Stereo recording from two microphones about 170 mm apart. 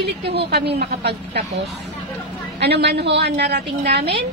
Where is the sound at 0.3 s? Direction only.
70° right (ahead or behind).